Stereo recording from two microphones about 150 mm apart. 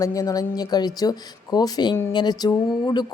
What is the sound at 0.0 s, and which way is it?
Speech, 20° left (ahead or behind).